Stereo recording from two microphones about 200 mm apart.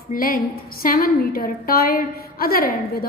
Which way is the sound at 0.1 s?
45° left (ahead or behind).